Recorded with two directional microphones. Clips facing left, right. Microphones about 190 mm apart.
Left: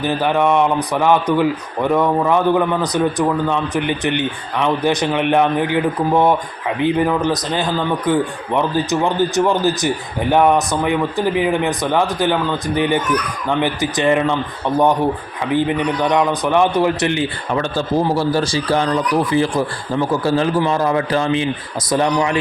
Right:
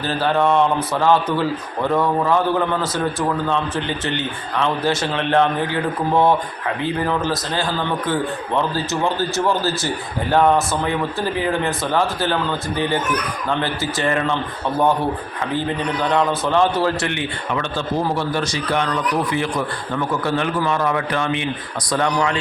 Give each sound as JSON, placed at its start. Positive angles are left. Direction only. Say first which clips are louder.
{"t": 0.0, "sound": "a man's voice", "louder": "left 2 dB", "side_deg": 15}
{"t": 15.5, "sound": "a man's voice", "louder": "left 5 dB", "side_deg": 15}
{"t": 17.1, "sound": "speech", "louder": "left 4 dB", "side_deg": 35}